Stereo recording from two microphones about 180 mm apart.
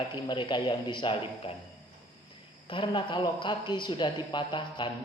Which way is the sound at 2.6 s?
25° left (ahead or behind).